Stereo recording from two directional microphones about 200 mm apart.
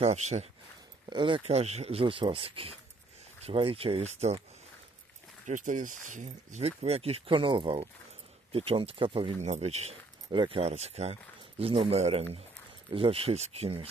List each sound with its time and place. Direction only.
0.0 s speech: 35° right (ahead or behind)
5.4 s speech: 40° right (ahead or behind)